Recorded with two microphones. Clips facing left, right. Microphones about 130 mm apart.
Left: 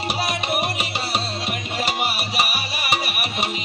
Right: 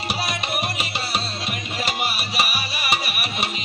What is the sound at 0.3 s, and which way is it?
Music, 50° left (ahead or behind).